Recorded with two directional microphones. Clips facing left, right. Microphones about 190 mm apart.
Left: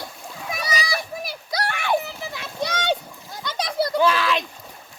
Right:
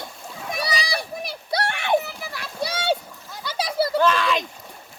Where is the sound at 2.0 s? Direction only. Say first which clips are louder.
Left 1 dB; 20° left (ahead or behind).